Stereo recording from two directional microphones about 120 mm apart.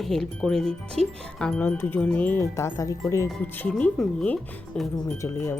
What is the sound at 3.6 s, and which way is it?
Speech, 10° left (ahead or behind).